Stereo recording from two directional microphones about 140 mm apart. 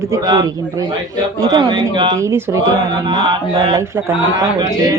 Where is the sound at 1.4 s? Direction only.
30° right (ahead or behind).